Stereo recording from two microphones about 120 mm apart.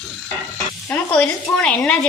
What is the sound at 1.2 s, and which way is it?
Speech, 10° left (ahead or behind).